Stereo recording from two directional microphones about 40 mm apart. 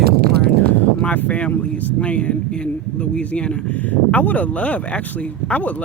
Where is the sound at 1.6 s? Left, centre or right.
Left.